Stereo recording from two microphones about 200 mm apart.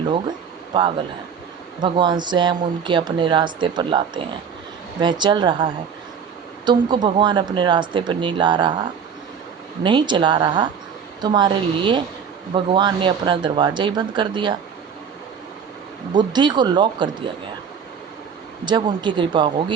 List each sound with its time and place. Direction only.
0.0 s speech: 25° right (ahead or behind)
16.1 s speech: 20° right (ahead or behind)
18.6 s speech: 20° right (ahead or behind)